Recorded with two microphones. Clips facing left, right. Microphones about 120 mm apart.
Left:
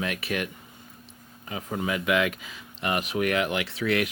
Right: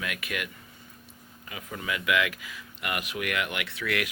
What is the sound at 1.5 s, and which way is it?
Speech, 30° left (ahead or behind).